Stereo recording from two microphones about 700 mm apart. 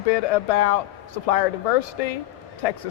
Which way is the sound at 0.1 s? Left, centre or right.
Left.